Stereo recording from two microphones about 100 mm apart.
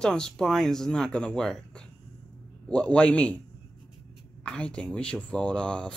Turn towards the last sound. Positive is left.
turn(degrees=10)  # may be behind; listen again after turning